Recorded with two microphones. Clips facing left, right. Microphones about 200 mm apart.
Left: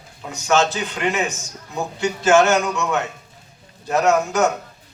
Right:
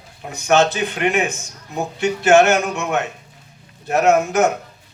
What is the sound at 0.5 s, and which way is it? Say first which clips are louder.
A man's voice: right 3 dB; 60° right (ahead or behind).